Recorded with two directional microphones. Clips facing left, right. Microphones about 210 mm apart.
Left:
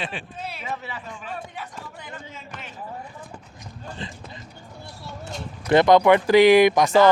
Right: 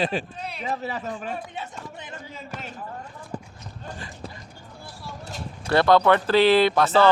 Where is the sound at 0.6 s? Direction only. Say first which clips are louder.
Right 8 dB; 40° right (ahead or behind).